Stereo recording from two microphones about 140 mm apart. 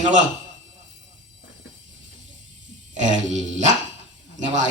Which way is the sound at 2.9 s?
60° right (ahead or behind).